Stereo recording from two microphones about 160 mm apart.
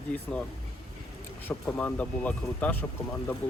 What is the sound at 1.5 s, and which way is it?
Speech, 10° left (ahead or behind).